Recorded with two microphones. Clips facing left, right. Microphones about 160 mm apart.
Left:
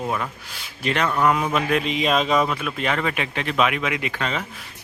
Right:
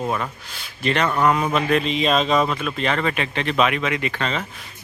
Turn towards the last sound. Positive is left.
turn(degrees=10)  # may be behind; listen again after turning